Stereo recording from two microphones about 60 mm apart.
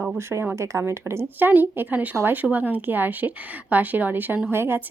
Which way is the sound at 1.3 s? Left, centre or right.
Right.